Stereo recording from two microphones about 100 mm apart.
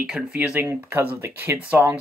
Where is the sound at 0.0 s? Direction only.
10° right (ahead or behind).